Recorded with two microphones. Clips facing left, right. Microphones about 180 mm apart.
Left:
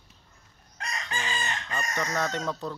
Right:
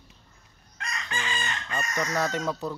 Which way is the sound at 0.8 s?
35° left (ahead or behind).